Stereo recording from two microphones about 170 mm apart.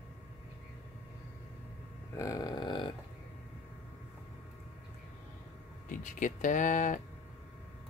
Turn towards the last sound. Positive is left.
turn(degrees=50)  # may be behind; listen again after turning